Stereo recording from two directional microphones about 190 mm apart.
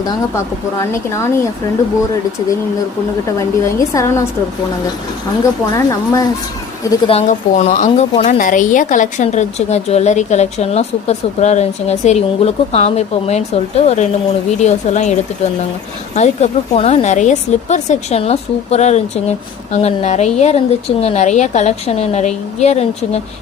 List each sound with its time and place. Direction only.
0.0 s speech: 15° left (ahead or behind)
3.3 s speech: 15° left (ahead or behind)
5.4 s speech: 15° left (ahead or behind)
7.1 s speech: 35° left (ahead or behind)
16.1 s speech: 35° left (ahead or behind)